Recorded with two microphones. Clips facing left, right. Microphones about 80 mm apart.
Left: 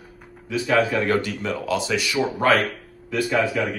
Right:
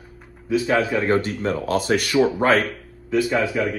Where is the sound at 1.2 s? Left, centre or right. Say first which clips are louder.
Right 3 dB; right.